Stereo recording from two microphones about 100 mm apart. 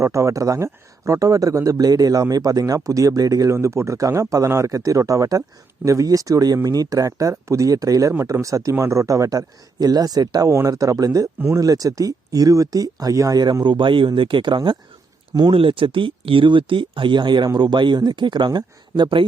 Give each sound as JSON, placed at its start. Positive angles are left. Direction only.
{"t": 0.0, "sound": "speech", "side_deg": -30}